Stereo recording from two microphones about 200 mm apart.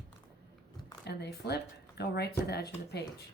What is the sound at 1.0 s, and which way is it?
A woman's voice, 55° left (ahead or behind).